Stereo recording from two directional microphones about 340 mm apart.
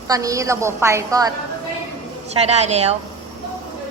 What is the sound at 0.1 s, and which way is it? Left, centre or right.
A woman's voice, centre.